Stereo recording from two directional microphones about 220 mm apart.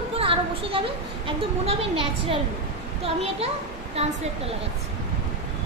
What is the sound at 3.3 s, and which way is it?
Speech, 25° right (ahead or behind).